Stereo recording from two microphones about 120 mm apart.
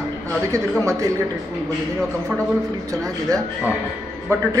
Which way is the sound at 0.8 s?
25° right (ahead or behind).